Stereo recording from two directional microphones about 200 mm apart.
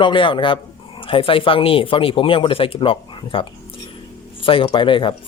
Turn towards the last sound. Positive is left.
turn(degrees=25)  # may be behind; listen again after turning